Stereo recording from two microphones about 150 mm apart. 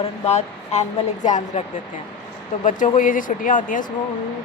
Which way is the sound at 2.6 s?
55° left (ahead or behind).